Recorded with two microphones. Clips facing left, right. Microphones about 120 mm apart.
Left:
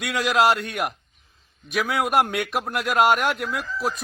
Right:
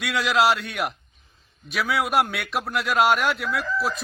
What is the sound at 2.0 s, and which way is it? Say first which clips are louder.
Speech: left 2 dB; 50° left (ahead or behind).